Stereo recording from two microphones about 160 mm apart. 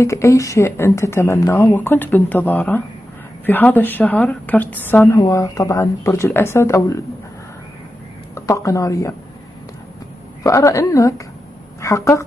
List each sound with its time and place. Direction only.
0.0 s speech: 20° left (ahead or behind)
8.4 s a woman's voice: 20° left (ahead or behind)
10.4 s a woman's voice: 20° left (ahead or behind)